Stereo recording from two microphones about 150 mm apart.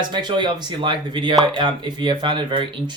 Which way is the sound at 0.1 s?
30° right (ahead or behind).